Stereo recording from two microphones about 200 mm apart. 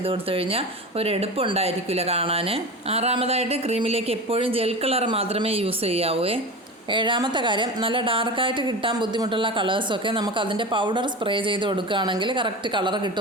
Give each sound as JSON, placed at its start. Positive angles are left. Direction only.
{"t": 0.0, "sound": "speech", "side_deg": -30}